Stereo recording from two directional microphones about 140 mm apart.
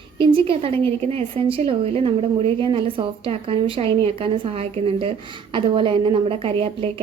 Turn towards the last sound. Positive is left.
turn(degrees=-40)  # may be behind; listen again after turning